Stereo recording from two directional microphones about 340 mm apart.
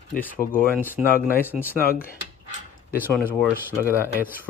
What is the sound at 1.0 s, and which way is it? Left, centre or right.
Speech, centre.